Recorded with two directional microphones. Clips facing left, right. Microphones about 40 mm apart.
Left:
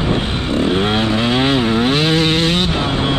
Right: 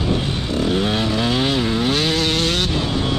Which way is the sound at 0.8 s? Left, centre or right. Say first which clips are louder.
Left 4 dB; left.